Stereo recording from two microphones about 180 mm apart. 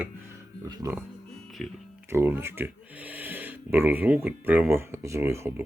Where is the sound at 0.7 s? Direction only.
20° right (ahead or behind).